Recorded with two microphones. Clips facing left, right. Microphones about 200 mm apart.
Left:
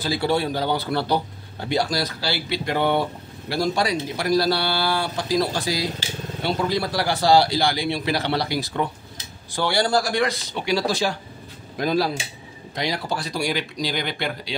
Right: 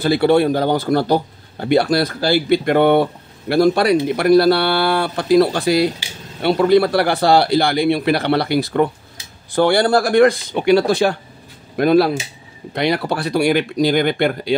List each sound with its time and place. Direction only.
0.0 s speech: 60° right (ahead or behind)